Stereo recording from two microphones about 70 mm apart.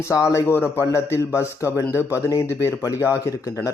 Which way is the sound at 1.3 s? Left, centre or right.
Left.